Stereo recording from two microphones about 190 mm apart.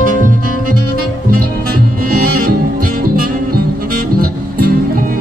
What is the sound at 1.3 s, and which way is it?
Music, 50° right (ahead or behind).